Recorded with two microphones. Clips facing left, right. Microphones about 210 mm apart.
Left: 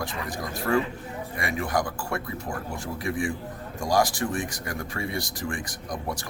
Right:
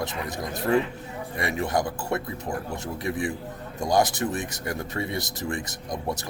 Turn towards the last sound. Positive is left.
turn(degrees=-25)  # may be behind; listen again after turning